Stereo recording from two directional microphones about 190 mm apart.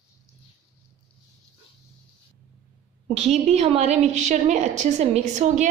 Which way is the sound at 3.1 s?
35° right (ahead or behind).